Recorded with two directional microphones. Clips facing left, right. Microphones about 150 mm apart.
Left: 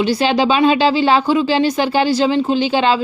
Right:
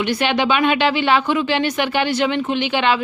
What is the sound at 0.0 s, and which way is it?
Speech, 35° left (ahead or behind).